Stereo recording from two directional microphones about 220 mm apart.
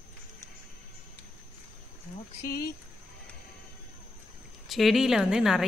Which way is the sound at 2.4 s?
45° left (ahead or behind).